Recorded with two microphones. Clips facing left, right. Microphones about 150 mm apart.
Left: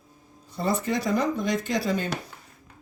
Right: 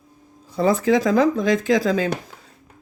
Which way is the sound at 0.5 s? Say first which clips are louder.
Right 9 dB; 90° right.